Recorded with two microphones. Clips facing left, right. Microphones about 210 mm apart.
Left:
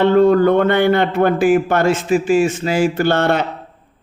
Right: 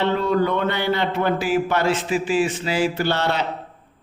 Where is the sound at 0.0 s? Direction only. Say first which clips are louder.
Left 9 dB; 50° left (ahead or behind).